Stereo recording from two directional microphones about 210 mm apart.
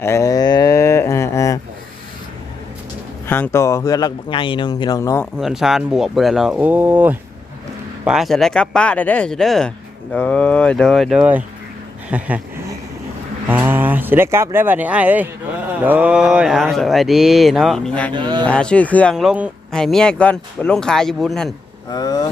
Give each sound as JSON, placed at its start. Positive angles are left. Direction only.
{"t": 0.0, "sound": "cattle", "side_deg": 15}
{"t": 3.2, "sound": "speech", "side_deg": 10}
{"t": 5.2, "sound": "speech", "side_deg": 0}
{"t": 13.5, "sound": "speech", "side_deg": -10}
{"t": 18.1, "sound": "a sound", "side_deg": -20}
{"t": 18.4, "sound": "speech", "side_deg": 5}
{"t": 21.8, "sound": "vehicle", "side_deg": 20}